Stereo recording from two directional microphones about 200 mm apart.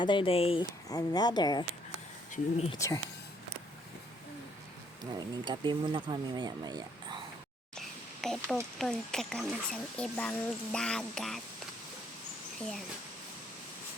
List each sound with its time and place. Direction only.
0.0 s speech: 25° left (ahead or behind)
2.3 s speech: 30° left (ahead or behind)
2.7 s speech: 15° left (ahead or behind)
5.2 s speech: 20° right (ahead or behind)
7.8 s a sound: centre (ahead or behind)
8.8 s speech: 5° left (ahead or behind)
12.5 s speech: centre (ahead or behind)